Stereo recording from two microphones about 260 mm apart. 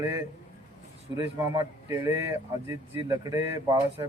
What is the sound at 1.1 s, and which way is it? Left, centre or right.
Speech, centre.